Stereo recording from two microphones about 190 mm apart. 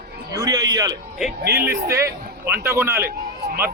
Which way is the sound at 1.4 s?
55° right (ahead or behind).